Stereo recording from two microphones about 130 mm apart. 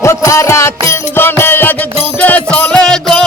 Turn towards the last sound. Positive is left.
turn(degrees=5)  # may be behind; listen again after turning